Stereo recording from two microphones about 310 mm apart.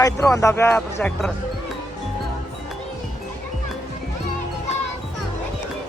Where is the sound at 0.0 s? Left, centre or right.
Centre.